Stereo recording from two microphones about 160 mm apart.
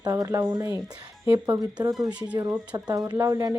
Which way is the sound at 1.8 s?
20° right (ahead or behind).